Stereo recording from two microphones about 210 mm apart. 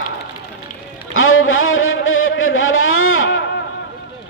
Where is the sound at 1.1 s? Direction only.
75° left (ahead or behind).